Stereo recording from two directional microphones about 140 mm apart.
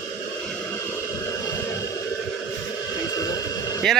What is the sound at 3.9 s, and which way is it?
Speech, centre (ahead or behind).